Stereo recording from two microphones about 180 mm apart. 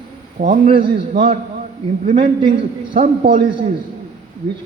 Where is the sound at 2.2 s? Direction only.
30° right (ahead or behind).